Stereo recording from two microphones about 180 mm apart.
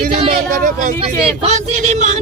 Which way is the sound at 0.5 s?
50° right (ahead or behind).